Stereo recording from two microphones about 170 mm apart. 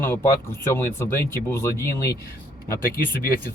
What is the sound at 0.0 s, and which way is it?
Speech, 15° left (ahead or behind).